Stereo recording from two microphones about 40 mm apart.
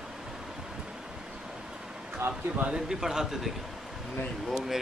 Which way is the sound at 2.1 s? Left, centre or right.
Right.